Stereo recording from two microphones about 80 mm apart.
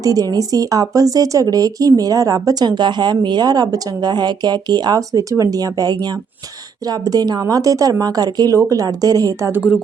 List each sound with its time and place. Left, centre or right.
0.0 s a woman's voice: right